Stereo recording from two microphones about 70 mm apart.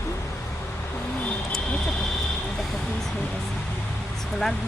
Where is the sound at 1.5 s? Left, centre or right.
Centre.